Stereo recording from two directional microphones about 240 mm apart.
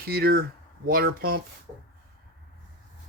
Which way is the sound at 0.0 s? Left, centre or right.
Right.